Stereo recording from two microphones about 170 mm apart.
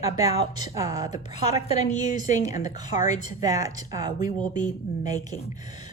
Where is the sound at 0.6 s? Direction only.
20° right (ahead or behind).